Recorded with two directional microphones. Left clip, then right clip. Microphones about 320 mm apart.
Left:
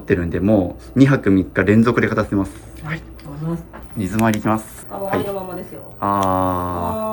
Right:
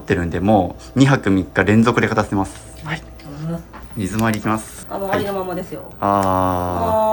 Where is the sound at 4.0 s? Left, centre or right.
Centre.